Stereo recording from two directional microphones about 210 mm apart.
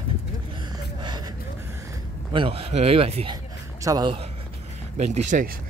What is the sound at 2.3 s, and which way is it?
Speech, 25° right (ahead or behind).